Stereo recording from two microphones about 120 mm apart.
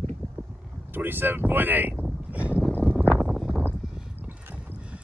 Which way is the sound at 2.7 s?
10° left (ahead or behind).